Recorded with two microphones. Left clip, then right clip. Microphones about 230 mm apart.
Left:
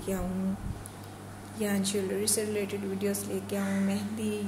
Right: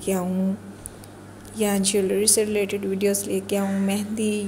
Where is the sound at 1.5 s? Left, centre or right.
Right.